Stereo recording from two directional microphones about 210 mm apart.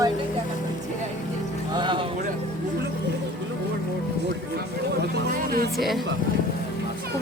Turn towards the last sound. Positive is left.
turn(degrees=0)  # may be behind; listen again after turning